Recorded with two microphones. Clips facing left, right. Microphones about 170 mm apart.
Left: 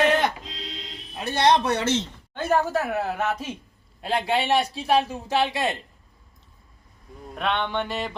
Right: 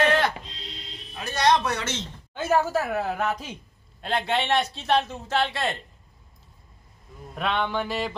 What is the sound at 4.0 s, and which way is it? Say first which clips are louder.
Chant: left 2 dB; 10° left (ahead or behind).